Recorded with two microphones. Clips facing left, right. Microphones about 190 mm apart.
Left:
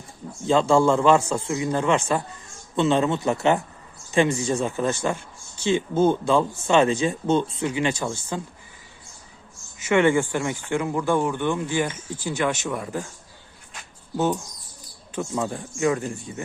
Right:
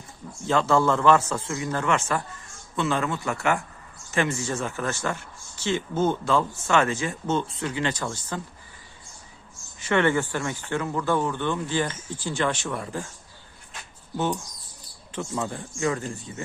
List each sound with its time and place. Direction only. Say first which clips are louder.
0.4 s speech: left 3 dB; 15° left (ahead or behind)
9.9 s speech: left 3 dB; 10° left (ahead or behind)
15.1 s speech: left 3 dB; 15° left (ahead or behind)